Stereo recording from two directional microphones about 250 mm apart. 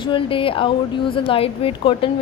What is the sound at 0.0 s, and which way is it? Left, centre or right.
A woman's voice, centre.